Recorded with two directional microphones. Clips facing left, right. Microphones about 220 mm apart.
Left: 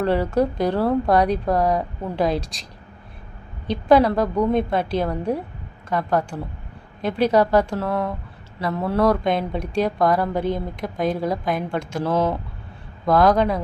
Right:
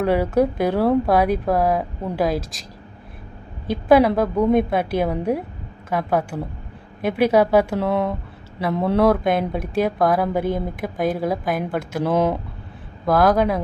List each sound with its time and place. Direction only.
0.0 s speech: 10° right (ahead or behind)
3.8 s speech: 10° right (ahead or behind)
7.9 s speech: 20° right (ahead or behind)
9.0 s a woman's voice: 5° right (ahead or behind)
13.1 s a woman's voice: 5° right (ahead or behind)